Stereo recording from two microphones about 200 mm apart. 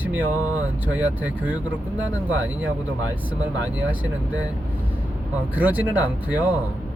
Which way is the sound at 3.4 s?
10° right (ahead or behind).